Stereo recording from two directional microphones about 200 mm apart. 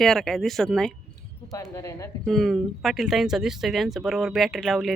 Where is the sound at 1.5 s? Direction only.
15° left (ahead or behind).